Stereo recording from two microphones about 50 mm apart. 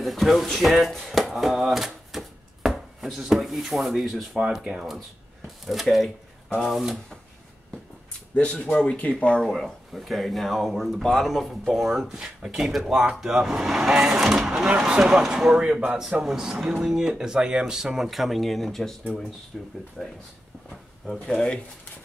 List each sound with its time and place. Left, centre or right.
0.0 s speech: centre
4.4 s speech: centre
5.7 s speech: centre
8.4 s speech: left
9.4 s speech: centre
14.9 s speech: centre
15.6 s speech: right
16.3 s speech: centre
21.3 s speech: centre